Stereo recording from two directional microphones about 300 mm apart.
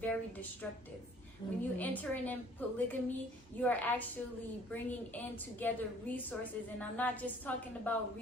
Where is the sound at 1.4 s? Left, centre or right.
Centre.